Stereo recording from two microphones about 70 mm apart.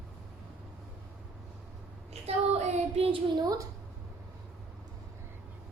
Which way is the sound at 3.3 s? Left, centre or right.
Right.